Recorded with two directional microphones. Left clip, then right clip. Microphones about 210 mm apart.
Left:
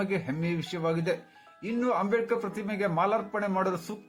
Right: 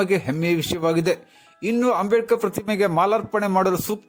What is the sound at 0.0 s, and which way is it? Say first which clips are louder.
Speech: right 10 dB; 45° right (ahead or behind).